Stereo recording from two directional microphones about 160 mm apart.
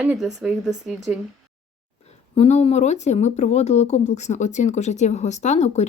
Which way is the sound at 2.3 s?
40° left (ahead or behind).